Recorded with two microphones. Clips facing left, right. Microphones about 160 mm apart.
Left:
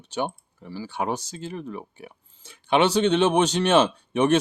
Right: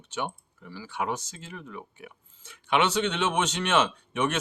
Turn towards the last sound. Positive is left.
turn(degrees=30)  # may be behind; listen again after turning